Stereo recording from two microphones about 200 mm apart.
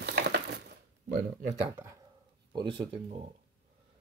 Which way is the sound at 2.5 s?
20° right (ahead or behind).